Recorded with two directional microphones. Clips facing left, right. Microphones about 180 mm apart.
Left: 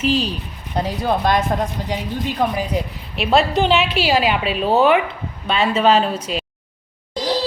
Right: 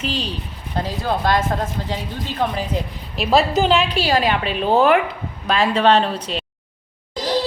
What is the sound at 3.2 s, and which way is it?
A woman's voice, centre (ahead or behind).